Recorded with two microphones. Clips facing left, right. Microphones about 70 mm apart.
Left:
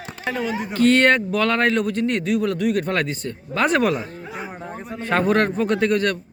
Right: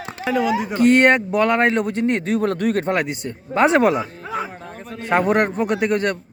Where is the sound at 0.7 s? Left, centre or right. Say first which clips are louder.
Right 1 dB; right.